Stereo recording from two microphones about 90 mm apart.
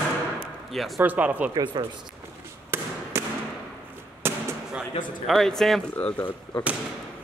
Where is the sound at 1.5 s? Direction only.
60° right (ahead or behind).